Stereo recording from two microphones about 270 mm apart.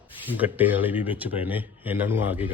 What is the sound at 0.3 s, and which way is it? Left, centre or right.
Speech, centre.